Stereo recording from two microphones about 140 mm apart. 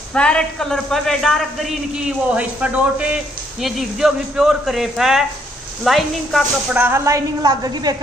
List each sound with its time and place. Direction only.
0.1 s a man's voice: 5° left (ahead or behind)
6.7 s a woman's voice: 15° right (ahead or behind)